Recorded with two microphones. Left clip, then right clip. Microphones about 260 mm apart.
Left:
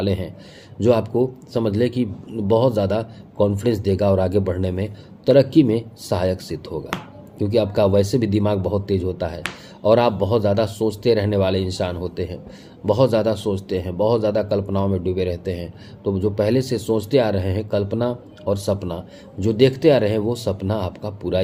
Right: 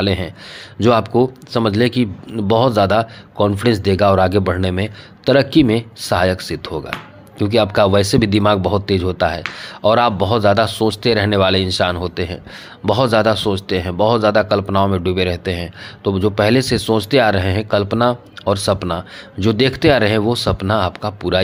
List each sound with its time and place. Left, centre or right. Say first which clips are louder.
0.0 s a man's voice: right 5 dB; right